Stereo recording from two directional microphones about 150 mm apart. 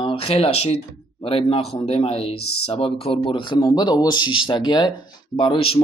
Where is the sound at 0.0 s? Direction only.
40° left (ahead or behind).